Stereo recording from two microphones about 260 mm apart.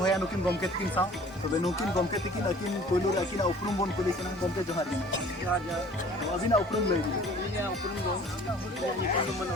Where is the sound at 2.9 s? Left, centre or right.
Centre.